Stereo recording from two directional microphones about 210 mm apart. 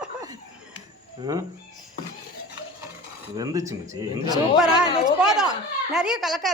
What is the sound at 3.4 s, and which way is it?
A man's voice, 15° right (ahead or behind).